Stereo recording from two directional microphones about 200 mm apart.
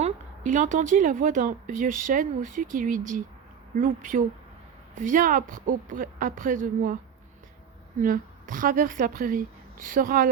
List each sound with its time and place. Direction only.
0.0 s a woman's voice: 40° right (ahead or behind)
8.0 s a woman's voice: 45° right (ahead or behind)